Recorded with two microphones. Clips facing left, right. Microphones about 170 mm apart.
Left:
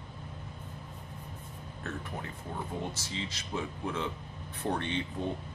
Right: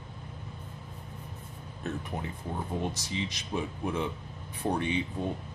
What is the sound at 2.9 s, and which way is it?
Speech, 15° right (ahead or behind).